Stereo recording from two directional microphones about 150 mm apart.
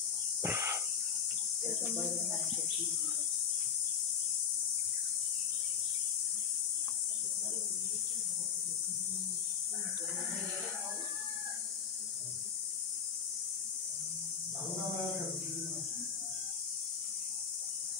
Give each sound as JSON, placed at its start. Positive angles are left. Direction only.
{"t": 0.4, "sound": "sneeze", "side_deg": -15}